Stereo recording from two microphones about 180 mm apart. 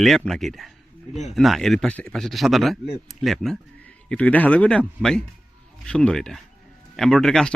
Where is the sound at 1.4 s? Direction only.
Centre (ahead or behind).